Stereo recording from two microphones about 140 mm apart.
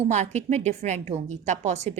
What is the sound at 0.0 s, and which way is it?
A woman's voice, 55° right (ahead or behind).